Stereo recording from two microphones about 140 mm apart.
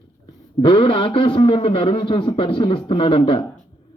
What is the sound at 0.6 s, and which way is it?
A man's voice, 40° left (ahead or behind).